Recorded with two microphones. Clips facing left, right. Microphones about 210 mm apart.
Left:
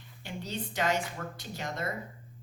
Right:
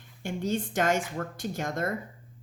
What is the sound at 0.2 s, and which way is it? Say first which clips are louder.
A woman's voice: right 8 dB; 50° right (ahead or behind).